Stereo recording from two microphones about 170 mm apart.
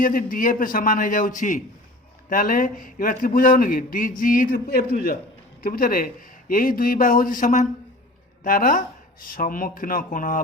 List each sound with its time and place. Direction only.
0.0 s a man's voice: 55° left (ahead or behind)